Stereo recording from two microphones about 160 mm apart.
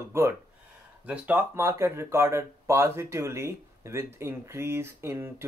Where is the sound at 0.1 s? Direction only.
15° right (ahead or behind).